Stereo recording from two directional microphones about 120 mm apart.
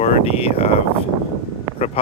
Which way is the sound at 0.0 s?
60° left (ahead or behind).